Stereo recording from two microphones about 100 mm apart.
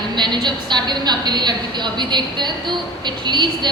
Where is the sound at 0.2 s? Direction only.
50° right (ahead or behind).